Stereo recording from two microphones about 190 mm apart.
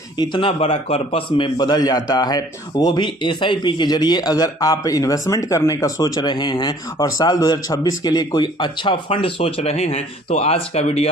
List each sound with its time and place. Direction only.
0.2 s a man's voice: 25° left (ahead or behind)